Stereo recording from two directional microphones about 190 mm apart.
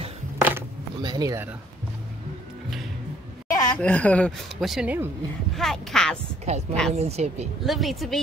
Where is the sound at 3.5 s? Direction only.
20° left (ahead or behind).